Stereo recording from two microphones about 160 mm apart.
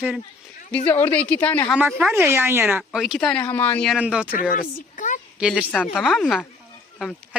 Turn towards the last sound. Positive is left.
turn(degrees=0)  # may be behind; listen again after turning